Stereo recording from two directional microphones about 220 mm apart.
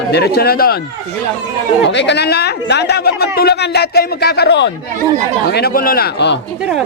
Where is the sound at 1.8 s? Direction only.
55° left (ahead or behind).